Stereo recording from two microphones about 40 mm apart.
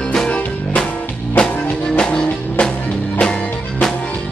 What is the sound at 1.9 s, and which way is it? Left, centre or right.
Music, left.